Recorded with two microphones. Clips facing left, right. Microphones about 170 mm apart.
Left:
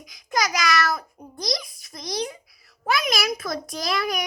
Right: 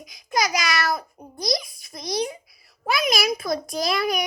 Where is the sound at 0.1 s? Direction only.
30° right (ahead or behind).